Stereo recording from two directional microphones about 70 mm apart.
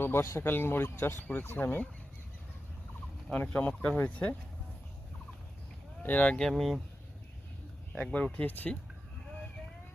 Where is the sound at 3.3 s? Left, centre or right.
Left.